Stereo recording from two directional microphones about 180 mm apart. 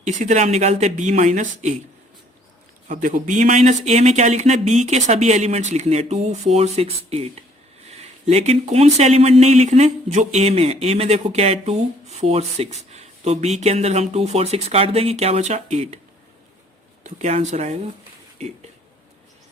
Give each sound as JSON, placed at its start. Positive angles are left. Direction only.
{"t": 0.0, "sound": "speech", "side_deg": -40}
{"t": 2.9, "sound": "speech", "side_deg": -45}
{"t": 8.3, "sound": "speech", "side_deg": -35}
{"t": 17.0, "sound": "speech", "side_deg": -40}